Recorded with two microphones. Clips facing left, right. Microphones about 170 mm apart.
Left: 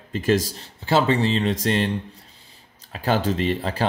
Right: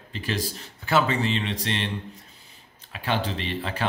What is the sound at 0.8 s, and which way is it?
Speech, 30° left (ahead or behind).